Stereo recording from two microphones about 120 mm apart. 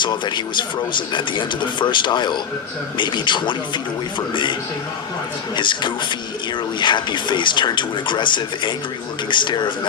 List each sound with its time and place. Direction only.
0.0 s speech: 40° left (ahead or behind)
5.5 s speech: 40° left (ahead or behind)